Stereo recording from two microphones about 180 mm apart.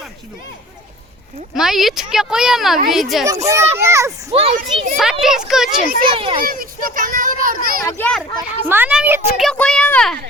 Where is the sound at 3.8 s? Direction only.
15° right (ahead or behind).